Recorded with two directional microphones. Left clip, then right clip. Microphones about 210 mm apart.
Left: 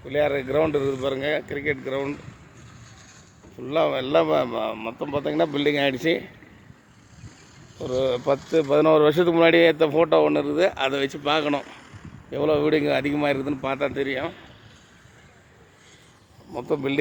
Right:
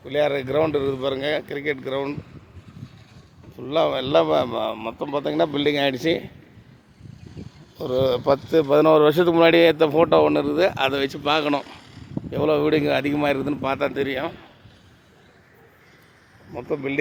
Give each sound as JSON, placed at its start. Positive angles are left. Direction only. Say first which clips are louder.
{"t": 0.0, "sound": "speech", "louder": "right 1 dB", "side_deg": 0}
{"t": 3.6, "sound": "speech", "louder": "right 1 dB", "side_deg": -5}
{"t": 7.8, "sound": "speech", "louder": "right 3 dB", "side_deg": -15}
{"t": 16.5, "sound": "speech", "louder": "left 1 dB", "side_deg": 15}